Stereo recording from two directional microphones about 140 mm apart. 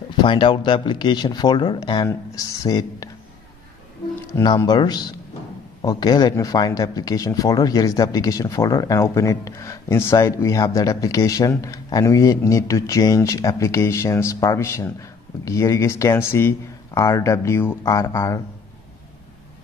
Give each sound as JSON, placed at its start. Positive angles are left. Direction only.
{"t": 0.2, "sound": "speech", "side_deg": 35}
{"t": 4.6, "sound": "speech", "side_deg": 30}